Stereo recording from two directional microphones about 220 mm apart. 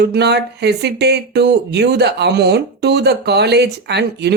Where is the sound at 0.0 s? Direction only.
50° right (ahead or behind).